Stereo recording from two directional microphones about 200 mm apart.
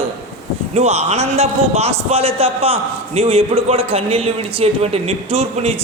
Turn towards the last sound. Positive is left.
turn(degrees=-30)  # may be behind; listen again after turning